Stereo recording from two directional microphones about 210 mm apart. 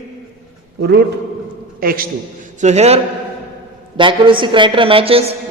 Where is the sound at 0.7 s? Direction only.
55° right (ahead or behind).